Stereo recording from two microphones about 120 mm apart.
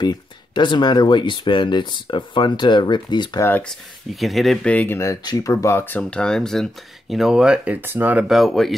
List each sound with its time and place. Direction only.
0.0 s speech: 35° left (ahead or behind)
3.3 s speech: 20° left (ahead or behind)
3.6 s speech: centre (ahead or behind)
4.7 s speech: 20° left (ahead or behind); by 8.3 s 15° right (ahead or behind)
8.3 s speech: centre (ahead or behind)